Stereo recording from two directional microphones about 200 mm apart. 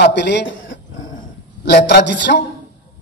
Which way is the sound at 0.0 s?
60° left (ahead or behind).